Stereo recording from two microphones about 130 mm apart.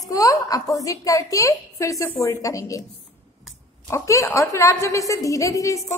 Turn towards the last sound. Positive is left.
turn(degrees=25)  # may be behind; listen again after turning